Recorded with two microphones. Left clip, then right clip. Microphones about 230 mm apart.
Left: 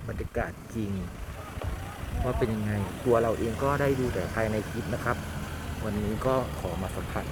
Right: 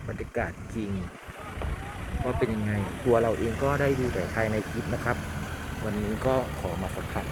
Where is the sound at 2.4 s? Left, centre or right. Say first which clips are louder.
Right 1 dB; left.